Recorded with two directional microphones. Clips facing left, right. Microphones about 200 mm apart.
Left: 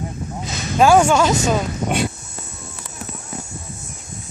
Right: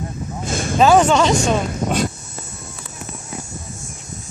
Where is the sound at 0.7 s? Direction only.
10° left (ahead or behind).